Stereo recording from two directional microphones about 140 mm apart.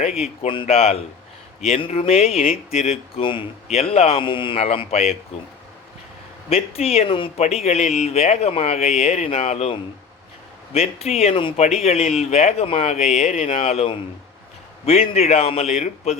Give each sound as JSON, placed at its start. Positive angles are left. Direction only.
{"t": 0.7, "sound": "speech", "side_deg": 50}
{"t": 4.6, "sound": "speech", "side_deg": 50}
{"t": 6.5, "sound": "speech", "side_deg": 45}
{"t": 10.8, "sound": "speech", "side_deg": 50}
{"t": 13.6, "sound": "speech", "side_deg": 45}